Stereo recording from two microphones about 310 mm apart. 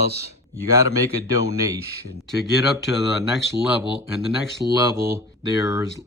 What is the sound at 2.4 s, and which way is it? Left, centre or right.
Speech, centre.